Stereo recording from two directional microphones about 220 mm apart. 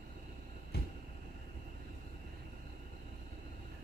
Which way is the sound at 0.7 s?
45° left (ahead or behind).